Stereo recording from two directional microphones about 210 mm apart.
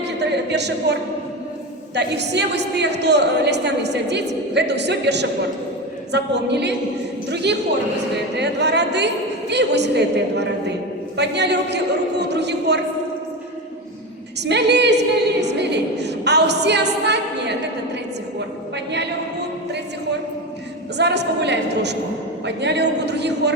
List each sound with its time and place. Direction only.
0.2 s speech: 55° right (ahead or behind)
2.0 s a woman's voice: 55° right (ahead or behind)
11.2 s a woman's voice: 55° right (ahead or behind)
14.4 s a woman's voice: 55° right (ahead or behind)
21.0 s a woman's voice: 55° right (ahead or behind)